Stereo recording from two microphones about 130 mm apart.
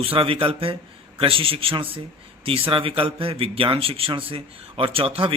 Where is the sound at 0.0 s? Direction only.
45° right (ahead or behind).